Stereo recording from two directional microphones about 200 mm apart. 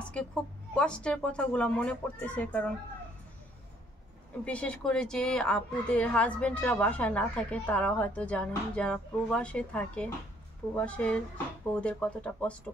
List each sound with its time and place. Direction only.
0.0 s a woman's voice: 5° left (ahead or behind)
4.5 s a woman's voice: 5° left (ahead or behind)